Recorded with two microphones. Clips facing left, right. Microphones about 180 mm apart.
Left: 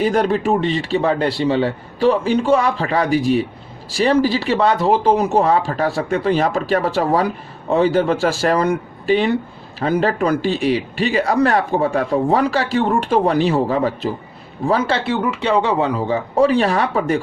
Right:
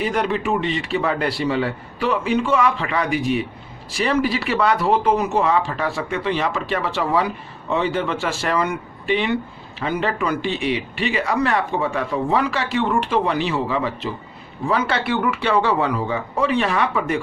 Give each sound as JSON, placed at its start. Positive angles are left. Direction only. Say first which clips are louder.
{"t": 0.0, "sound": "speech", "louder": "left 5 dB", "side_deg": 35}
{"t": 14.7, "sound": "speech", "louder": "left 3 dB", "side_deg": 30}